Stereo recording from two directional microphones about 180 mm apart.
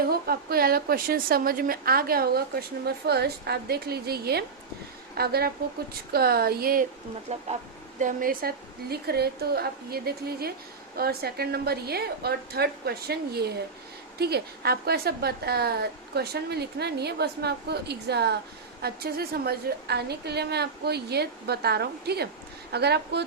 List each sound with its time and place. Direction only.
0.1 s a woman's voice: 55° right (ahead or behind)
7.3 s a woman's voice: 40° right (ahead or behind); by 23.2 s 65° right (ahead or behind)